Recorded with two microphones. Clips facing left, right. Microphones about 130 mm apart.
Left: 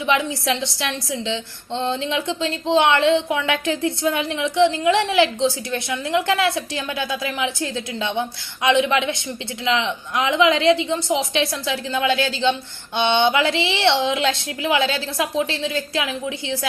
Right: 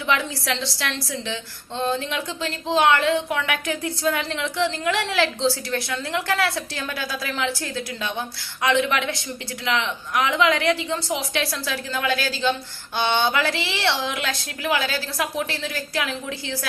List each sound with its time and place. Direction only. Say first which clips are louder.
0.0 s a woman's voice: left 4 dB; 20° left (ahead or behind)